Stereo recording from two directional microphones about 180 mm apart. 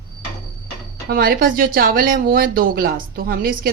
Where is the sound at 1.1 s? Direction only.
55° right (ahead or behind).